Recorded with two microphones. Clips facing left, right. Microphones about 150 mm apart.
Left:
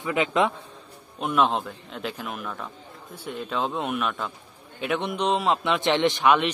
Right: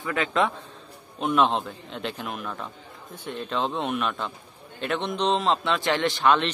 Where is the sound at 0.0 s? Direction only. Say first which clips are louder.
Left 2 dB; 20° left (ahead or behind).